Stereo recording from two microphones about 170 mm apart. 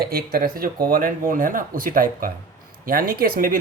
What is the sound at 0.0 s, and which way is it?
Speech, 65° right (ahead or behind).